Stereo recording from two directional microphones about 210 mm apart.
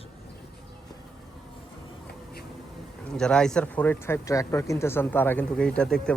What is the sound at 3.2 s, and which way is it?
Speech, 5° left (ahead or behind).